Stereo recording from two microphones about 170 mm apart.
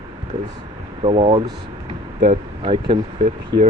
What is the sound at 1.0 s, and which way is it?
Speech, 30° right (ahead or behind).